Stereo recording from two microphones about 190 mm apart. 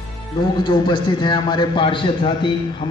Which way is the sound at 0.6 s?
25° left (ahead or behind).